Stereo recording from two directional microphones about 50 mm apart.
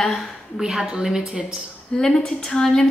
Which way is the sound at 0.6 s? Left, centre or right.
Centre.